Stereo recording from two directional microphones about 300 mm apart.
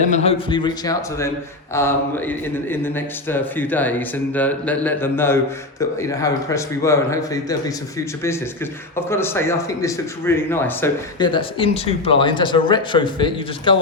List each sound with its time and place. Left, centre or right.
0.0 s speech: left